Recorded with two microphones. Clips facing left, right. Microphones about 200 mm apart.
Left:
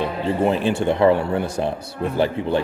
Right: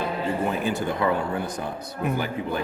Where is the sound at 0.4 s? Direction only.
30° left (ahead or behind).